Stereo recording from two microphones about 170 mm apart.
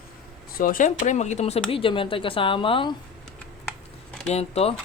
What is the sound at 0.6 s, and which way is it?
Speech, 50° left (ahead or behind).